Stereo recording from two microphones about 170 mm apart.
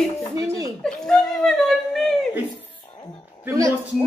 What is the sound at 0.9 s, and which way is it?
Speech, 5° left (ahead or behind).